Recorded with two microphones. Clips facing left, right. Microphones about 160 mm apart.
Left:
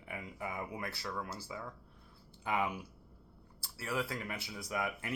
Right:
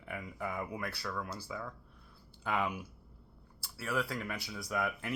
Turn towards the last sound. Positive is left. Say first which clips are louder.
# right 2 dB
turn(degrees=20)  # may be behind; listen again after turning